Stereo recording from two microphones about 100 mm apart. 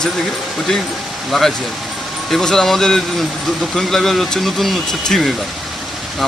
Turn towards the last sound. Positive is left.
turn(degrees=0)  # may be behind; listen again after turning